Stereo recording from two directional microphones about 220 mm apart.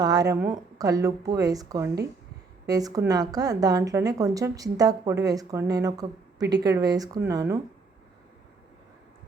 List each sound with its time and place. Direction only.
0.0 s a woman's voice: 15° right (ahead or behind)